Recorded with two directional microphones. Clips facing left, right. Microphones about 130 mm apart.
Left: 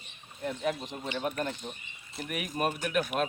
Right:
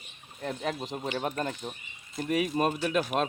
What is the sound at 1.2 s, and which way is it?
Speech, 40° right (ahead or behind).